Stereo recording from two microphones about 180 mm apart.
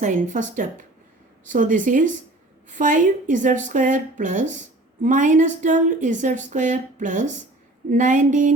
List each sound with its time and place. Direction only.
0.0 s a woman's voice: 45° right (ahead or behind)